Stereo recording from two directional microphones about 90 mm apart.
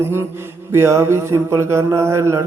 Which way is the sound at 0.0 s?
30° right (ahead or behind).